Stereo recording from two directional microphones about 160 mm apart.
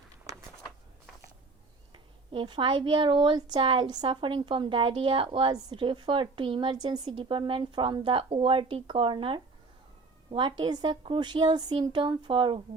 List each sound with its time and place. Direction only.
2.3 s a woman's voice: 30° right (ahead or behind)